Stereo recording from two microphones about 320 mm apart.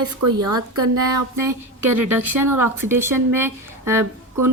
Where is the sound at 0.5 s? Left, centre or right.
Centre.